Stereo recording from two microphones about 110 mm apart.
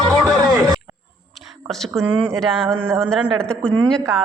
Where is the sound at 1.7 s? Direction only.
5° left (ahead or behind).